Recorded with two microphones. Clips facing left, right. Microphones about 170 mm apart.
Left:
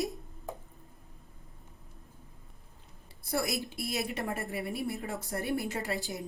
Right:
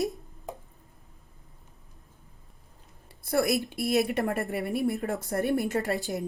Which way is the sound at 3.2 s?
60° right (ahead or behind).